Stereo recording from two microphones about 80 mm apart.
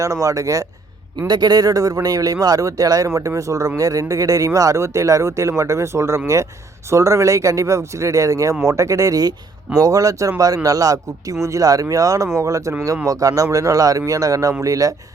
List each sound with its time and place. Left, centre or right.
0.0 s speech: right
1.3 s speech: right